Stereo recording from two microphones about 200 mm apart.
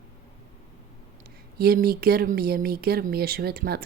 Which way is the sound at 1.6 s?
50° right (ahead or behind).